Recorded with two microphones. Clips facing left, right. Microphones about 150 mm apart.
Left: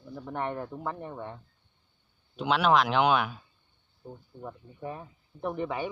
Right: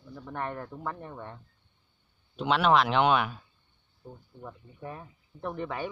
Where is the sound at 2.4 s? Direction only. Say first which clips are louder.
Even; centre (ahead or behind).